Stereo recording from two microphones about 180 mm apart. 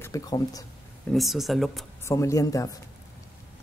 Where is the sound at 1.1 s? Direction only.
Centre (ahead or behind).